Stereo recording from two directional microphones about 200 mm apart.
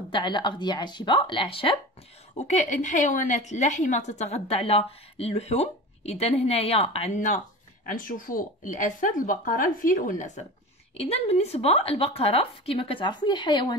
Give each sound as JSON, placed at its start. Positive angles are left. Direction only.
{"t": 0.1, "sound": "a woman's voice", "side_deg": 25}